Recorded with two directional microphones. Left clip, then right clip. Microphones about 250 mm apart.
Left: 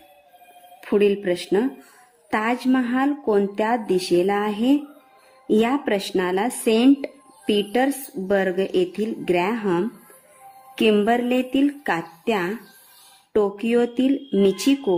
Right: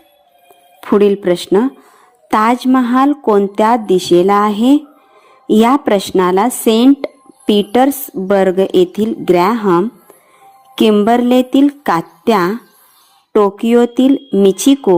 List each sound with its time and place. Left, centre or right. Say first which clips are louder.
0.8 s speech: right 8 dB; centre
10.9 s speech: right 9 dB; centre